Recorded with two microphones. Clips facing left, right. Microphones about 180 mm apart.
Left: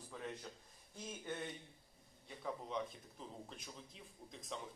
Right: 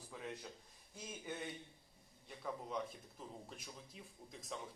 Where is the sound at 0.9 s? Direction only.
5° right (ahead or behind).